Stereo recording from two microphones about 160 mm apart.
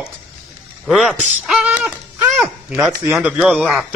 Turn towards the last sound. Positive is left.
turn(degrees=0)  # may be behind; listen again after turning